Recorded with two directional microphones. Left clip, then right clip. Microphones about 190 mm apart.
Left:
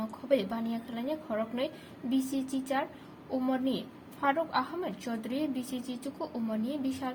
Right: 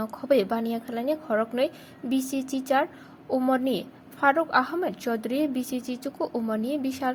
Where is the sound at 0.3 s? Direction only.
35° right (ahead or behind).